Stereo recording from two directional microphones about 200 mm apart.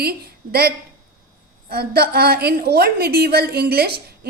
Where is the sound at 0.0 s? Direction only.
50° right (ahead or behind).